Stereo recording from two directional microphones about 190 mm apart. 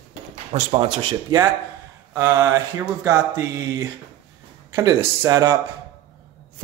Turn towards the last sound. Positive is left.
turn(degrees=-20)  # may be behind; listen again after turning